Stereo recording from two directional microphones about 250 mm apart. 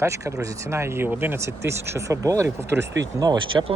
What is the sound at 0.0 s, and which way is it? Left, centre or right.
Speech, centre.